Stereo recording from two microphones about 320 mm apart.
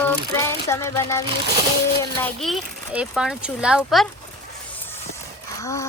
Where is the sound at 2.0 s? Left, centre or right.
Centre.